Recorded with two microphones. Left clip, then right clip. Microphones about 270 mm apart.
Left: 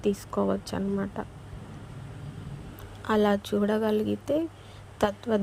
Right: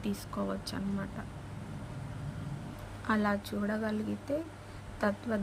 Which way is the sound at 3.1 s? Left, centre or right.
Left.